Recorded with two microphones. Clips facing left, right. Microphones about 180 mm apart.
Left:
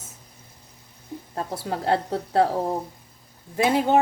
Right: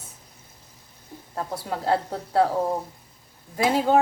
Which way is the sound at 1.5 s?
25° left (ahead or behind).